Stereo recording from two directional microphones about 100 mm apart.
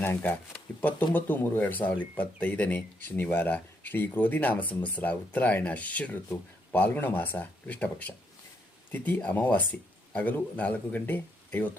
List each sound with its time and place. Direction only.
0.0 s speech: 20° left (ahead or behind)